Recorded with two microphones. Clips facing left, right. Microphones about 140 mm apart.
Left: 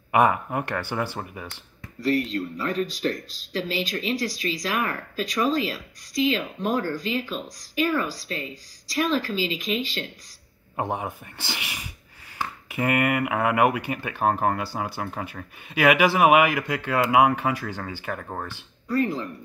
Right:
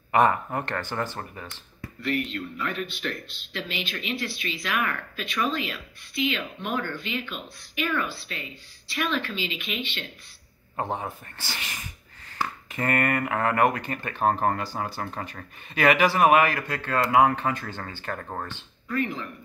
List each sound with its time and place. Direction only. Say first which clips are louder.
0.1 s speech: left 1 dB; 10° left (ahead or behind)
2.0 s speech: left 5 dB; 35° left (ahead or behind)
10.8 s speech: left 2 dB; 15° left (ahead or behind)
18.9 s speech: left 4 dB; 35° left (ahead or behind)